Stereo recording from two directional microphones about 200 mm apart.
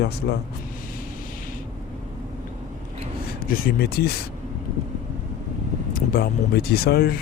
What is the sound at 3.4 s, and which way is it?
Speech, 45° left (ahead or behind).